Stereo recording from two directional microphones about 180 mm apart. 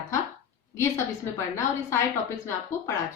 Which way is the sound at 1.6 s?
15° left (ahead or behind).